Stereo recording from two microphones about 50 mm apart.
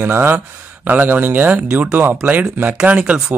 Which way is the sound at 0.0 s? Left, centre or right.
Right.